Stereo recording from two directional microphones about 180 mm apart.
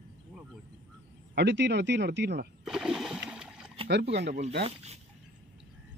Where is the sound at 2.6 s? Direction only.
5° right (ahead or behind).